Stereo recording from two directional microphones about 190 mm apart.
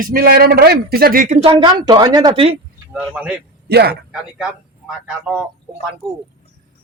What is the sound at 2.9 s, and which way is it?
Speech, 5° right (ahead or behind).